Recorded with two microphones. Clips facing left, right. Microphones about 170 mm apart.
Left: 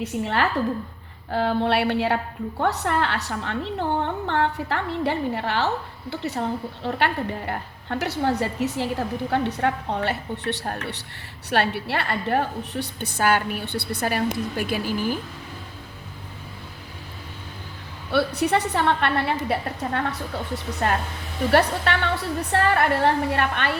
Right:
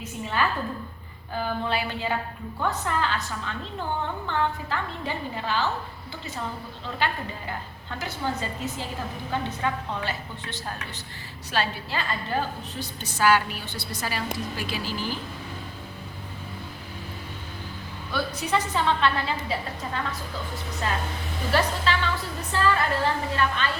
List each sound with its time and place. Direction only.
0.0 s a woman's voice: 70° left (ahead or behind); by 15.2 s 50° left (ahead or behind)
18.1 s a woman's voice: 65° left (ahead or behind)